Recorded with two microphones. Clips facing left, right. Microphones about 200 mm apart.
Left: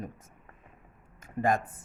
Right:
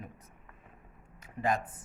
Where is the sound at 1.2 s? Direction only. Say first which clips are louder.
Left 4 dB; 50° left (ahead or behind).